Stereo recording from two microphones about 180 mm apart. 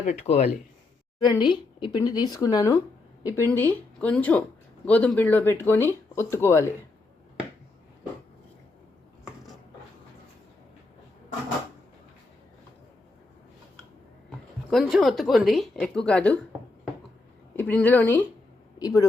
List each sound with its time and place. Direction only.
0.0 s speech: 40° left (ahead or behind)
1.2 s speech: 25° left (ahead or behind)
14.3 s speech: centre (ahead or behind)
17.6 s speech: 10° left (ahead or behind)